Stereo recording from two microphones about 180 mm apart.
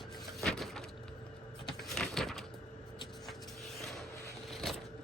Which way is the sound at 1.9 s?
Centre (ahead or behind).